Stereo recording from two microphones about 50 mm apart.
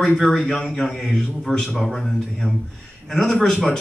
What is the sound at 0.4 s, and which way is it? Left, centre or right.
A man's voice, centre.